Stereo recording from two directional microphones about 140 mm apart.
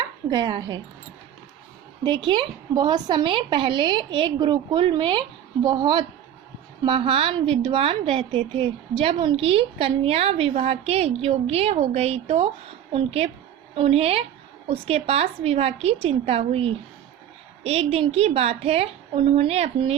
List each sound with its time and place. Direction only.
0.3 s a woman's voice: 30° right (ahead or behind)
2.0 s a woman's voice: 30° right (ahead or behind); by 19.9 s 45° right (ahead or behind)